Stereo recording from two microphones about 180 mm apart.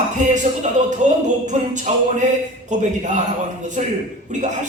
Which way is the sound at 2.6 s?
40° right (ahead or behind).